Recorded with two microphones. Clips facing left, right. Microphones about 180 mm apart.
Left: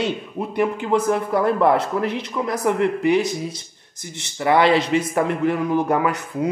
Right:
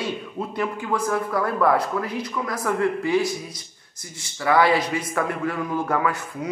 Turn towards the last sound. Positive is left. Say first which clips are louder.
# left 4 dB
turn(degrees=20)  # may be behind; listen again after turning